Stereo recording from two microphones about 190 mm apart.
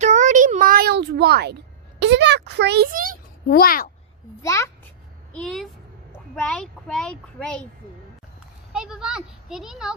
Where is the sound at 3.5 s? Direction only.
50° left (ahead or behind).